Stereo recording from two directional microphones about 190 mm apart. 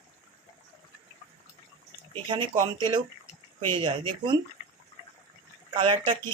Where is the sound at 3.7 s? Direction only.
25° right (ahead or behind).